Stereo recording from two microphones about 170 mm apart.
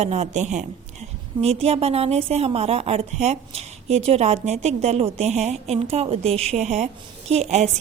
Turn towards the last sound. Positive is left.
turn(degrees=-40)  # may be behind; listen again after turning